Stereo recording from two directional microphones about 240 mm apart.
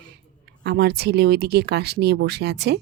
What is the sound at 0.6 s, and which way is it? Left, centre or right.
Speech, right.